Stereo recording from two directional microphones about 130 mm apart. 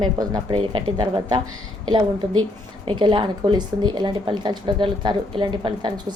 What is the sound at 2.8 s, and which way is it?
Speech, 40° right (ahead or behind).